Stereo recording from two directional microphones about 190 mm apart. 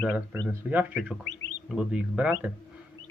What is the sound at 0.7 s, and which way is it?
A man's voice, 5° right (ahead or behind).